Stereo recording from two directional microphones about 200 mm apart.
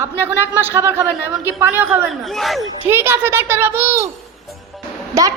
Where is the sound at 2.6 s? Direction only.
10° right (ahead or behind).